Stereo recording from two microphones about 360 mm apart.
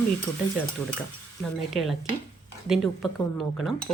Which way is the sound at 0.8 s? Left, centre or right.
Centre.